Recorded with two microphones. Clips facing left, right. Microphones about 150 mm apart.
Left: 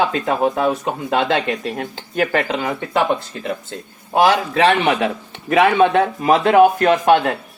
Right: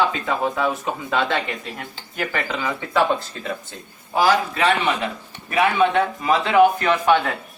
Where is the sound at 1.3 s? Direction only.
85° left; by 2.5 s 65° left (ahead or behind).